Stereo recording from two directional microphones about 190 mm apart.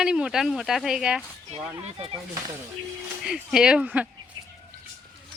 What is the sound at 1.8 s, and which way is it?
Speech, 30° right (ahead or behind).